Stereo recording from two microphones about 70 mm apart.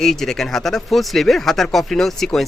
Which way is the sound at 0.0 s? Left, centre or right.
Centre.